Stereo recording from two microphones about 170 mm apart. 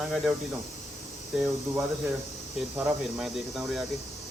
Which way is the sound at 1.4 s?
15° right (ahead or behind).